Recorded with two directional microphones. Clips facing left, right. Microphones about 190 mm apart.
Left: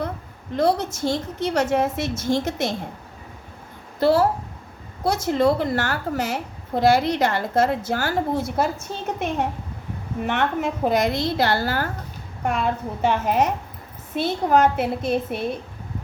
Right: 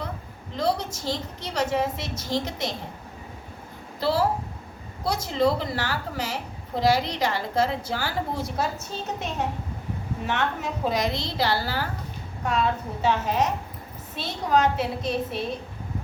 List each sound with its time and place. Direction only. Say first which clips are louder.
0.5 s a woman's voice: left 5 dB; 50° left (ahead or behind)
4.0 s a woman's voice: left 5 dB; 50° left (ahead or behind)
10.2 s a woman's voice: left 5 dB; 55° left (ahead or behind)